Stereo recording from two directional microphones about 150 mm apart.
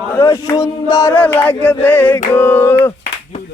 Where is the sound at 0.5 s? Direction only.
25° left (ahead or behind).